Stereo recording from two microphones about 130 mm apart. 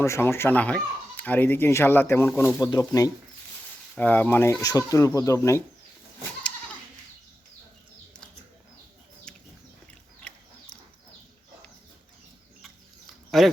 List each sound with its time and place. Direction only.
0.0 s a child's voice: 20° left (ahead or behind)
2.6 s speech: 25° left (ahead or behind)
3.9 s a child's voice: 10° left (ahead or behind)
4.6 s speech: 25° left (ahead or behind)
9.3 s a sound: 5° left (ahead or behind)
13.3 s speech: centre (ahead or behind)